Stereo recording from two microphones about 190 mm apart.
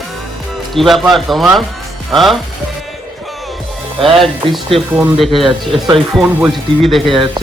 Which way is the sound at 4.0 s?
Centre (ahead or behind).